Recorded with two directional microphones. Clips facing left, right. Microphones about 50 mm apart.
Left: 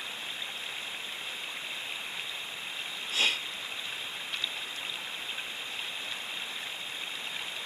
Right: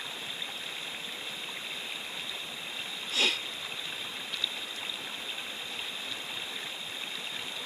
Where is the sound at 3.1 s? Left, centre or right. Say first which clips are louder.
Even; left.